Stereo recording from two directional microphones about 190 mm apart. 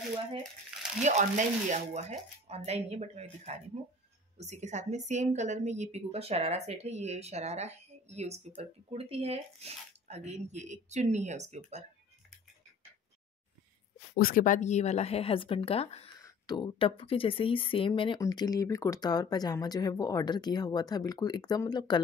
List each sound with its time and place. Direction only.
1.0 s a woman's voice: 40° right (ahead or behind)
14.1 s speech: 50° left (ahead or behind); by 22.0 s 20° left (ahead or behind)